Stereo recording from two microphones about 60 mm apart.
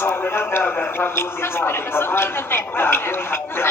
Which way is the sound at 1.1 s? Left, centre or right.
Left.